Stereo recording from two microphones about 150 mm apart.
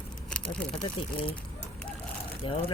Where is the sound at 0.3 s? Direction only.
5° left (ahead or behind).